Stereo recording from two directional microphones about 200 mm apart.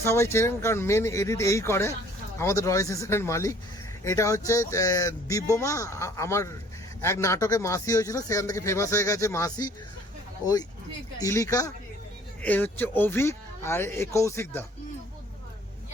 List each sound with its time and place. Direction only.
0.0 s speech: 15° left (ahead or behind)